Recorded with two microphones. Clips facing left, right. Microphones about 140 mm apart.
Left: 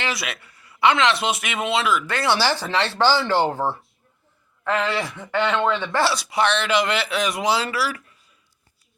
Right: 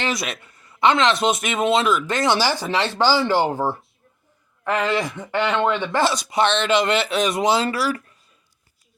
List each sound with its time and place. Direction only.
0.3 s speech: 20° right (ahead or behind)
0.7 s a sound: 20° right (ahead or behind)
1.2 s speech: 45° right (ahead or behind)
2.0 s speech: 15° right (ahead or behind)